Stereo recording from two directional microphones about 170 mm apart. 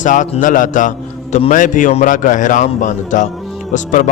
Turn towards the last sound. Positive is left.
turn(degrees=50)  # may be behind; listen again after turning